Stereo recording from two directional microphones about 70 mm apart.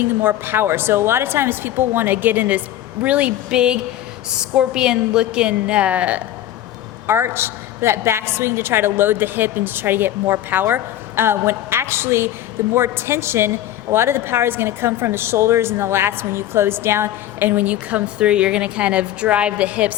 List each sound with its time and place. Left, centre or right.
0.0 s a woman's voice: right
7.1 s a woman's voice: right; by 20.0 s centre